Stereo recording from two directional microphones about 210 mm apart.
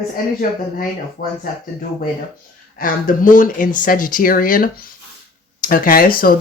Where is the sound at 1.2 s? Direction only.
45° left (ahead or behind).